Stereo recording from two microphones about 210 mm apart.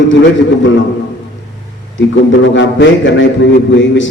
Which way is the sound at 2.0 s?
60° left (ahead or behind).